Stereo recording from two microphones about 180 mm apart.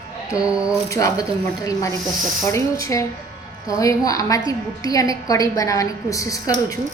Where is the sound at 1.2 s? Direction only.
20° left (ahead or behind).